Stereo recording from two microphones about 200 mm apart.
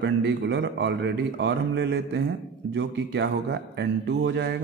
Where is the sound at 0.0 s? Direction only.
60° right (ahead or behind).